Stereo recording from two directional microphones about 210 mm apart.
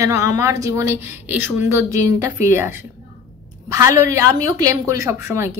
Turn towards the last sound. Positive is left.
turn(degrees=-15)  # may be behind; listen again after turning